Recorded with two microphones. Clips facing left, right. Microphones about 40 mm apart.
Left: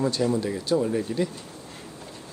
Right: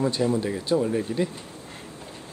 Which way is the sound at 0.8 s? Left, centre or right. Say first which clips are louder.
Even; centre.